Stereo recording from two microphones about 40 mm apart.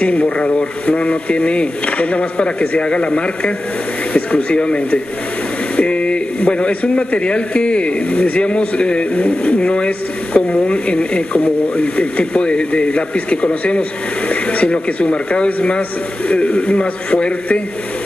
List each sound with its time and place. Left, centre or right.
0.0 s a man's voice: left